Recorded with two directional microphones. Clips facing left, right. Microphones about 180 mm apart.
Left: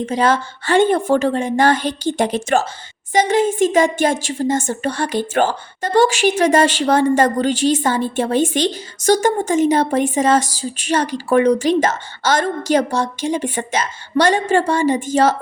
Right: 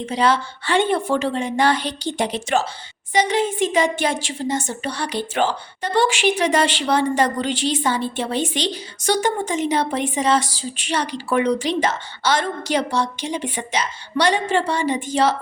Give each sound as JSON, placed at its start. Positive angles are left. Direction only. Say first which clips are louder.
{"t": 0.0, "sound": "a woman's voice", "louder": "left 2 dB", "side_deg": 45}